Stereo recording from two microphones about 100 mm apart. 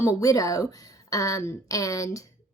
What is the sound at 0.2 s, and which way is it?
A woman's voice, 35° left (ahead or behind).